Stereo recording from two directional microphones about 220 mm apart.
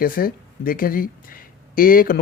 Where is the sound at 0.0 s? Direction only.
40° left (ahead or behind).